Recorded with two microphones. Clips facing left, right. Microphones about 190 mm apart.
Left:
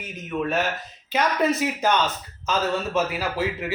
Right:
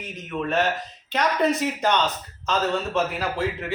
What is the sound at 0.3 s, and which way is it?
A man's voice, 5° left (ahead or behind).